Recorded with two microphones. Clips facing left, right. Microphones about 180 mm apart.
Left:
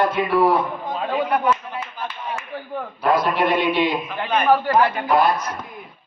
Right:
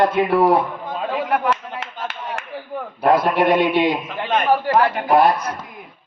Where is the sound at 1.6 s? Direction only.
90° right.